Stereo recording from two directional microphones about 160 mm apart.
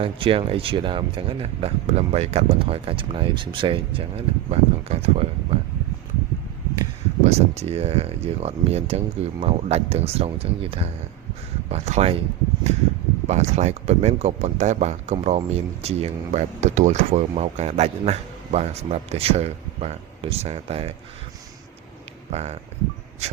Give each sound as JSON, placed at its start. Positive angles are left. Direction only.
{"t": 0.0, "sound": "speech", "side_deg": -35}
{"t": 7.3, "sound": "speech", "side_deg": -40}
{"t": 13.2, "sound": "speech", "side_deg": -45}
{"t": 22.3, "sound": "speech", "side_deg": -40}